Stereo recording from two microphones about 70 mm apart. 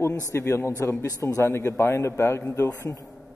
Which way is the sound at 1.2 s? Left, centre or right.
Left.